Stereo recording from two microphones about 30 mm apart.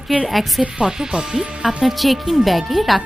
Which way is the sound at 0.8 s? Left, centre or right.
Right.